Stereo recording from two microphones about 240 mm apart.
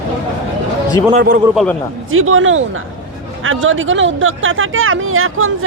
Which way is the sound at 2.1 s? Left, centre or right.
Right.